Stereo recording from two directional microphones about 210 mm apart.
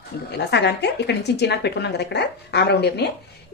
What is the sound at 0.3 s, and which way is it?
A woman's voice, 55° left (ahead or behind).